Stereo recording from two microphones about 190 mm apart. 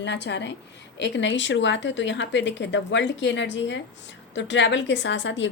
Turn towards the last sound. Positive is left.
turn(degrees=70)  # may be behind; listen again after turning